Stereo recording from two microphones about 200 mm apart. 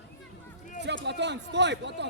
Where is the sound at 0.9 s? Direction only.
60° right (ahead or behind).